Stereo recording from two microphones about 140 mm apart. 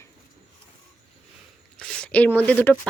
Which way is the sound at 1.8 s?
5° left (ahead or behind).